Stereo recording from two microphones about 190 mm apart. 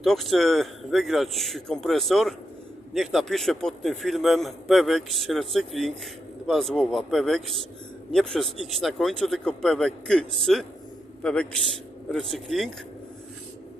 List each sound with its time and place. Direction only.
0.0 s a man's voice: centre (ahead or behind)